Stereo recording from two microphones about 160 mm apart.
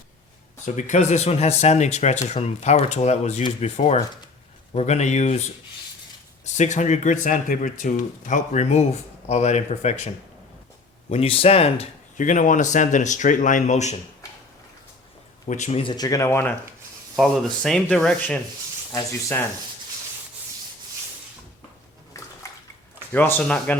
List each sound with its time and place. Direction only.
0.6 s speech: 50° left (ahead or behind)
11.1 s speech: 35° left (ahead or behind)
12.1 s speech: 55° left (ahead or behind)
15.4 s speech: 50° left (ahead or behind)
15.8 s speech: 25° left (ahead or behind)
17.2 s speech: centre (ahead or behind)
22.4 s bathtub: 20° left (ahead or behind)
23.1 s speech: 10° left (ahead or behind)